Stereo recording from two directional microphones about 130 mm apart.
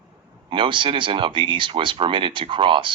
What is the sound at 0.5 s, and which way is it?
Speech, 40° right (ahead or behind).